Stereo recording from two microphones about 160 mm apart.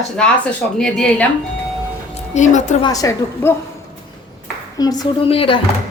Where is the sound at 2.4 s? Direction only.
50° left (ahead or behind).